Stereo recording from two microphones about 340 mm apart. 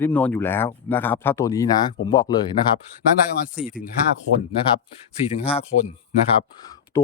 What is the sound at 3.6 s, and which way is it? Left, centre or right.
Speech, centre.